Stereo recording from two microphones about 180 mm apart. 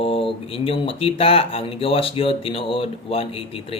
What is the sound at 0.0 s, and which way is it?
A man's voice, 30° left (ahead or behind).